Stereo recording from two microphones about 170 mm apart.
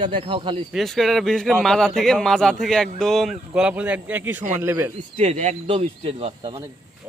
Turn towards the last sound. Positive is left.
turn(degrees=-35)  # may be behind; listen again after turning